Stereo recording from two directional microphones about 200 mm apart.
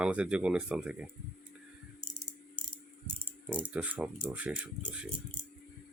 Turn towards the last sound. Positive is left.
turn(degrees=-5)  # may be behind; listen again after turning